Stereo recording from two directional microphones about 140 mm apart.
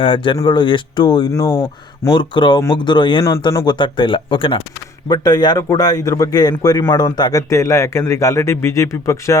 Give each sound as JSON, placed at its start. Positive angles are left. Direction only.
{"t": 0.0, "sound": "speech", "side_deg": 35}
{"t": 2.1, "sound": "speech", "side_deg": 35}